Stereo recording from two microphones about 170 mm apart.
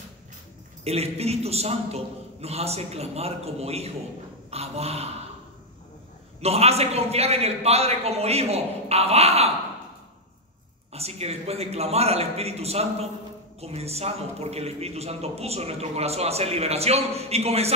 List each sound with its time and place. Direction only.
0.8 s a man's voice: 35° right (ahead or behind)
6.4 s a man's voice: 35° right (ahead or behind)
10.9 s a man's voice: 40° right (ahead or behind)